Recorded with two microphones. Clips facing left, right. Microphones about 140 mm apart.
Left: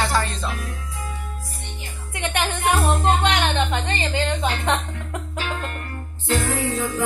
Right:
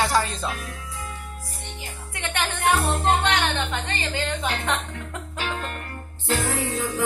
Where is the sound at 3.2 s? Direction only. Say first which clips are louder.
Left 3 dB; 20° left (ahead or behind).